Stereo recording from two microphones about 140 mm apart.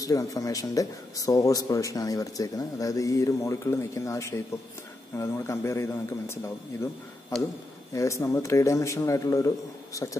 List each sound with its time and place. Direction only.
0.0 s speech: 25° left (ahead or behind)